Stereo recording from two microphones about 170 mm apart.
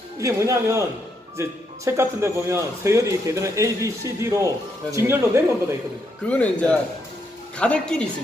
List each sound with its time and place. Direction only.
0.2 s speech: 20° right (ahead or behind)
6.2 s speech: 10° left (ahead or behind)